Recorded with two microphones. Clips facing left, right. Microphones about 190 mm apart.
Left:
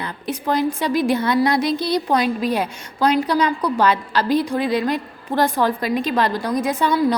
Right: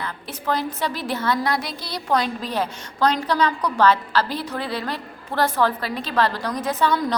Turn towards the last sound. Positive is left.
turn(degrees=10)  # may be behind; listen again after turning